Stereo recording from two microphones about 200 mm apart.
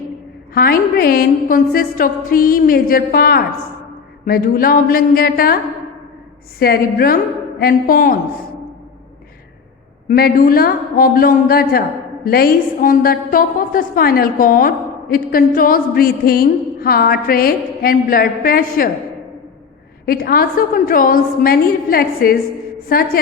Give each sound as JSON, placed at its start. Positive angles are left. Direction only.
{"t": 0.5, "sound": "a woman's voice", "side_deg": 50}
{"t": 6.6, "sound": "a woman's voice", "side_deg": 50}
{"t": 10.1, "sound": "a woman's voice", "side_deg": 45}
{"t": 20.1, "sound": "a woman's voice", "side_deg": 50}